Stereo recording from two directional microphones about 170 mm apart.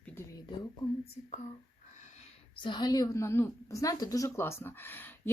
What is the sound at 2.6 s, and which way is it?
A woman's voice, 25° left (ahead or behind).